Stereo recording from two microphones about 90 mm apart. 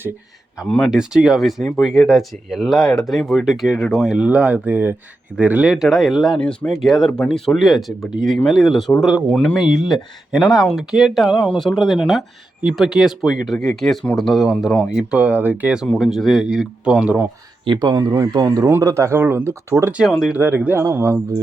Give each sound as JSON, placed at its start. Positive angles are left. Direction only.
{"t": 0.9, "sound": "speech", "side_deg": -5}
{"t": 4.2, "sound": "speech", "side_deg": -15}
{"t": 5.7, "sound": "speech", "side_deg": 0}
{"t": 6.4, "sound": "speech", "side_deg": 10}
{"t": 6.8, "sound": "speech", "side_deg": 0}
{"t": 15.9, "sound": "speech", "side_deg": 0}
{"t": 17.7, "sound": "speech", "side_deg": -50}
{"t": 20.1, "sound": "speech", "side_deg": 5}
{"t": 20.3, "sound": "speech", "side_deg": -20}
{"t": 20.8, "sound": "speech", "side_deg": -35}